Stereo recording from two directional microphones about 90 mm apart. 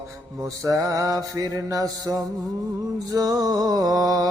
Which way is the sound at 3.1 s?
40° right (ahead or behind).